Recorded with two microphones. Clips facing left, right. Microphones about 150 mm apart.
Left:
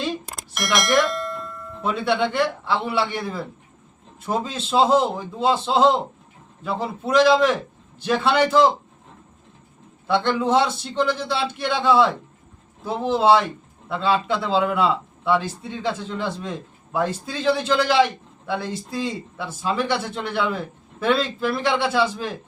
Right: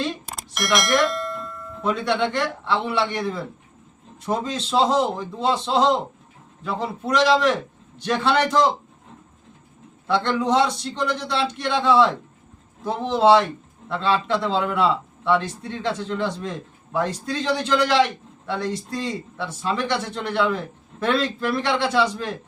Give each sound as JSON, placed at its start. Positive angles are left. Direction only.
{"t": 0.3, "sound": "a man's voice", "side_deg": 0}
{"t": 10.1, "sound": "a man's voice", "side_deg": 5}
{"t": 21.8, "sound": "a man's voice", "side_deg": 5}